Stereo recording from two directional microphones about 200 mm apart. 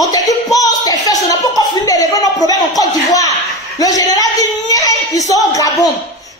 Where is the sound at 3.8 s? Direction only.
20° left (ahead or behind).